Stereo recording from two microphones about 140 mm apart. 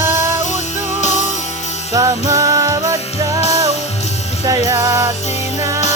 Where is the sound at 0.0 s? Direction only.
20° right (ahead or behind).